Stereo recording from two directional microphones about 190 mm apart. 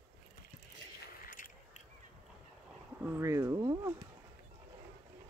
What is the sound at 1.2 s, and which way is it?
Biting, 45° left (ahead or behind).